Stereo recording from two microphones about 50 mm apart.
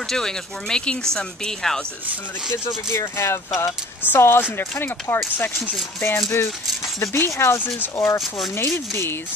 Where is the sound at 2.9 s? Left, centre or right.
Left.